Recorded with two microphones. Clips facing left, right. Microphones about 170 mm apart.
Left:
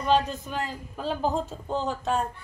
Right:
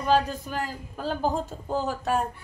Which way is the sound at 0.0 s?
5° right (ahead or behind).